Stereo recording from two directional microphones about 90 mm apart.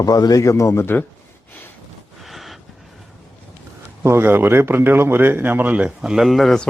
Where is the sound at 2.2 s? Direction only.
Centre (ahead or behind).